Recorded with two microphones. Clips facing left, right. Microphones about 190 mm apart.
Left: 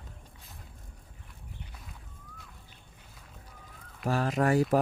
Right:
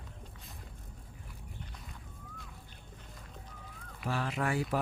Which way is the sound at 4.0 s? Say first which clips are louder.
Left 7 dB; 45° left (ahead or behind).